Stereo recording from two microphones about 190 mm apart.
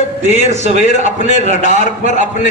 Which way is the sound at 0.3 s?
35° right (ahead or behind).